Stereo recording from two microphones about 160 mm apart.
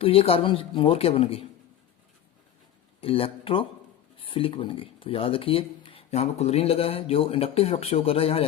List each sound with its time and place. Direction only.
0.0 s speech: 35° left (ahead or behind)
3.0 s speech: 35° left (ahead or behind)